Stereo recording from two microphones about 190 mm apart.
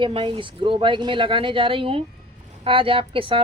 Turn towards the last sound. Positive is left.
turn(degrees=-30)  # may be behind; listen again after turning